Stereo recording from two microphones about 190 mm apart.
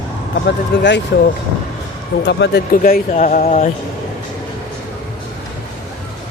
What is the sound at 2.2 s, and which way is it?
A man's voice, 65° left (ahead or behind).